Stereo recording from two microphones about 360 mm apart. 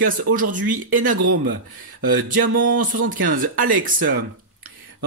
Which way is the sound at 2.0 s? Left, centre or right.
Right.